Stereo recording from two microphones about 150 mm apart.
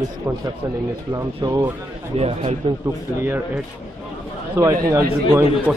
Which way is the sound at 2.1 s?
45° right (ahead or behind).